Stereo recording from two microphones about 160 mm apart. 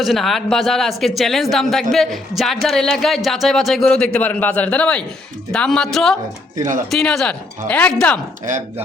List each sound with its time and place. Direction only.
0.0 s speech: centre (ahead or behind)
6.6 s speech: 55° right (ahead or behind)
6.9 s speech: 5° left (ahead or behind)